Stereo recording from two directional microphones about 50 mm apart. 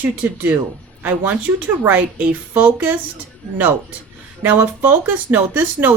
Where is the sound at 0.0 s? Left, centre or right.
Right.